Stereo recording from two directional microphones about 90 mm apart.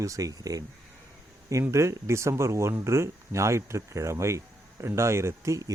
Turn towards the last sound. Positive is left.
turn(degrees=-35)  # may be behind; listen again after turning